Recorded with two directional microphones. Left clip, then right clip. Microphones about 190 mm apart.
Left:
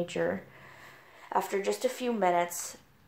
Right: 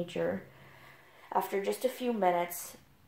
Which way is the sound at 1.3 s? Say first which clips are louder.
Left 2 dB; 30° left (ahead or behind).